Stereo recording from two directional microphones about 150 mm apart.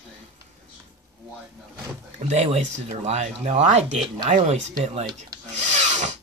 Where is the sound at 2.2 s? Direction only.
45° right (ahead or behind).